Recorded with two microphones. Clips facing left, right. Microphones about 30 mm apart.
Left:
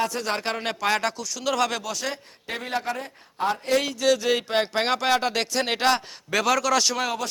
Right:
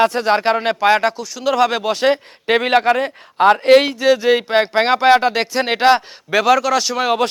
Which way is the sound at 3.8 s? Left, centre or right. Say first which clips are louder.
Right 8 dB; right.